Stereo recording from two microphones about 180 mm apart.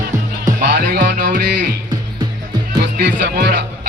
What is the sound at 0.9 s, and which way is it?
Music, 50° right (ahead or behind).